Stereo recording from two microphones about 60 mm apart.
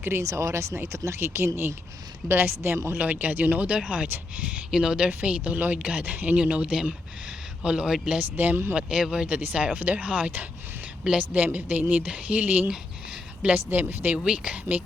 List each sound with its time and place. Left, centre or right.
0.2 s speech: right
2.2 s speech: right
3.0 s speech: right
5.4 s speech: right; by 7.9 s centre
8.2 s speech: right
8.7 s speech: centre
9.2 s speech: right